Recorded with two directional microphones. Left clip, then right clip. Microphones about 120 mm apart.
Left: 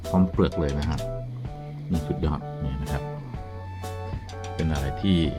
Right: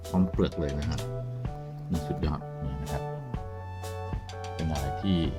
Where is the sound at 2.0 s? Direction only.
10° left (ahead or behind).